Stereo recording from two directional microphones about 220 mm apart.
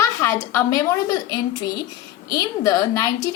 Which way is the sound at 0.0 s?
10° left (ahead or behind).